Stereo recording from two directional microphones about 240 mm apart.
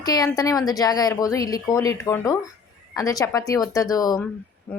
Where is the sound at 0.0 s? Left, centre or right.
Centre.